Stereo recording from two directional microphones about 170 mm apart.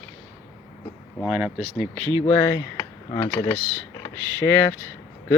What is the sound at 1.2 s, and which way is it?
Speech, 5° right (ahead or behind).